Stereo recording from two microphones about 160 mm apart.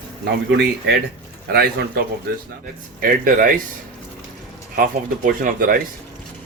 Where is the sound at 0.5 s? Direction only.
90° right.